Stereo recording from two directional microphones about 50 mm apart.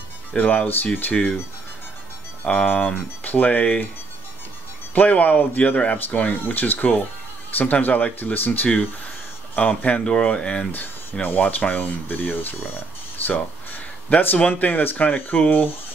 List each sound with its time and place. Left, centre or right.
0.3 s speech: left
2.4 s speech: left
4.9 s speech: left
9.6 s speech: left
10.7 s speech: left
13.2 s a sound: left
14.0 s speech: left